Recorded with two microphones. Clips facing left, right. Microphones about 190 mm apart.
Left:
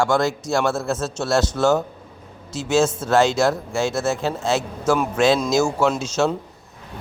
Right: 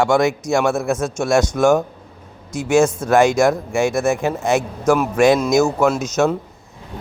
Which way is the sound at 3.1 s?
15° right (ahead or behind).